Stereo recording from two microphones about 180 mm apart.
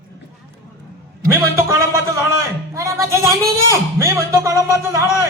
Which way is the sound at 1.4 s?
15° right (ahead or behind).